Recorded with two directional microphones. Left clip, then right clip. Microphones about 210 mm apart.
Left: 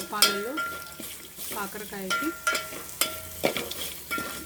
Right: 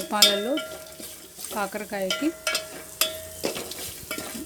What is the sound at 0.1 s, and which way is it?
Speech, 40° right (ahead or behind).